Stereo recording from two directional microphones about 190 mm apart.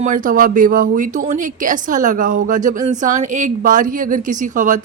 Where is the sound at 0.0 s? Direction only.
45° right (ahead or behind).